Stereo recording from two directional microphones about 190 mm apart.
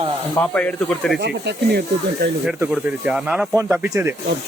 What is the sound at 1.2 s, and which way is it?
Speech, 60° right (ahead or behind).